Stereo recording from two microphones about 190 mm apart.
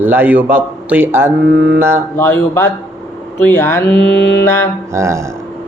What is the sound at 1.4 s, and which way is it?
Mantra, 60° right (ahead or behind).